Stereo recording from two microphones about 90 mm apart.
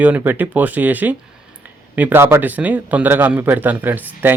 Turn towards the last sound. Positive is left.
turn(degrees=-20)  # may be behind; listen again after turning